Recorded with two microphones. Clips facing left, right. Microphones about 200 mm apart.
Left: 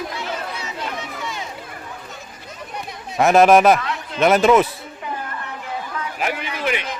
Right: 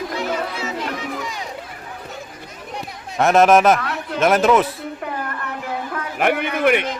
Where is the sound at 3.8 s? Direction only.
60° right (ahead or behind).